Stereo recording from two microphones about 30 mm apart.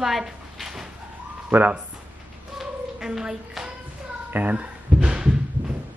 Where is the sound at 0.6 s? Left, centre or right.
Centre.